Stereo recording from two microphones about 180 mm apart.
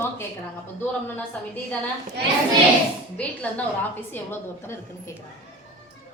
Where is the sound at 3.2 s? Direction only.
5° left (ahead or behind).